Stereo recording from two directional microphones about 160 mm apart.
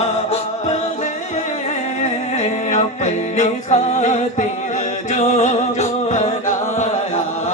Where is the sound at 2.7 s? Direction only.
50° left (ahead or behind).